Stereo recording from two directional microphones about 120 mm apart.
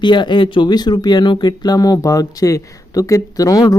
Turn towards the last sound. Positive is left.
turn(degrees=30)  # may be behind; listen again after turning